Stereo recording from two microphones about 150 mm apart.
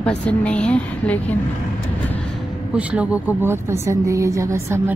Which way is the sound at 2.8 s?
10° right (ahead or behind).